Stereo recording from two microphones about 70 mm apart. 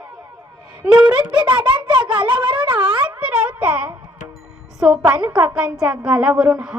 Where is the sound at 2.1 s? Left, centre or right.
Centre.